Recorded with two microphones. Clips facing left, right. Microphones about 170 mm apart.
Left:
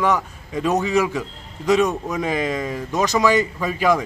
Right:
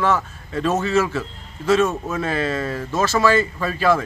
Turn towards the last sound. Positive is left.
turn(degrees=15)  # may be behind; listen again after turning